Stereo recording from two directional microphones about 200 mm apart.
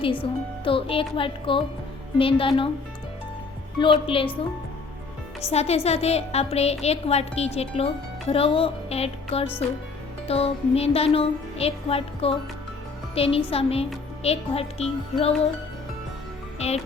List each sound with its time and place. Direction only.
0.6 s music: 25° left (ahead or behind)
3.8 s music: 25° left (ahead or behind)
5.5 s a woman's voice: 30° left (ahead or behind)
8.3 s music: 30° left (ahead or behind)
14.3 s a woman's voice: 30° left (ahead or behind)
16.6 s speech: 30° left (ahead or behind)